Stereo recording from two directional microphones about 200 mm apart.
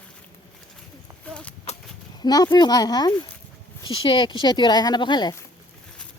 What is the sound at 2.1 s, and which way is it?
Speech, 20° left (ahead or behind).